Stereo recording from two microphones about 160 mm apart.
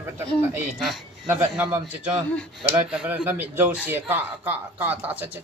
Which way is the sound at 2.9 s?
5° right (ahead or behind).